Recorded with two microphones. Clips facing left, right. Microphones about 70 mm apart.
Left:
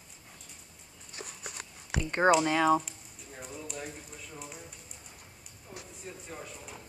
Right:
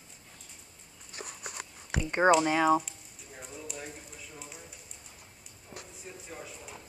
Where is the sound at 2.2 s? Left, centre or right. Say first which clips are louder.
Right 1 dB; centre.